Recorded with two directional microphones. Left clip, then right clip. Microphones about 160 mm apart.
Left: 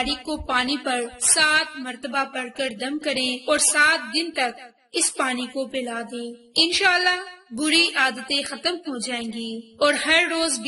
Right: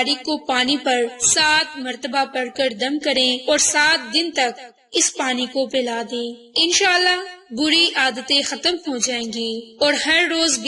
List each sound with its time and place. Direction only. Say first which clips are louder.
0.0 s a woman's voice: right 5 dB; 15° right (ahead or behind)